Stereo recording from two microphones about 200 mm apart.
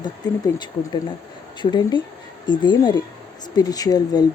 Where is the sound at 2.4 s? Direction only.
20° left (ahead or behind).